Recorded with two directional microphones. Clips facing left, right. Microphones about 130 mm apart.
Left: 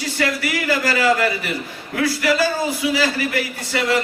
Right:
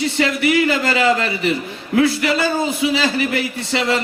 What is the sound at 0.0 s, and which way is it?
A man's voice, 25° right (ahead or behind).